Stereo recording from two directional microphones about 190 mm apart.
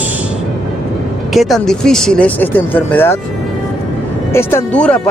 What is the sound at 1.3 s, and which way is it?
Speech, centre (ahead or behind).